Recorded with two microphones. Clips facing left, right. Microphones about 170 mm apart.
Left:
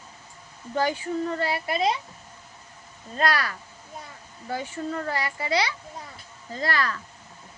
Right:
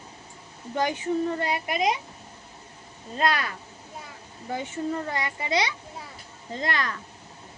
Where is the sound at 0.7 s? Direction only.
20° right (ahead or behind).